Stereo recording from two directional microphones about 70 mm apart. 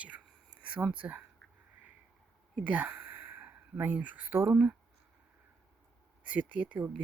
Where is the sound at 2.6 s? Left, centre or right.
Right.